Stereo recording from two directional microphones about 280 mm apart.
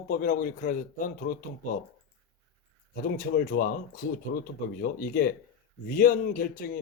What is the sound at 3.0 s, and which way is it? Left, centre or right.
Speech, left.